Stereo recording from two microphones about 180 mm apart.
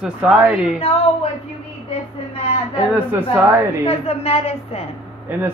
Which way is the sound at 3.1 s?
10° right (ahead or behind).